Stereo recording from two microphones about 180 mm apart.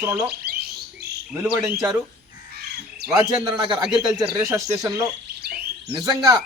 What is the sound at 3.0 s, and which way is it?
A man's voice, 20° right (ahead or behind).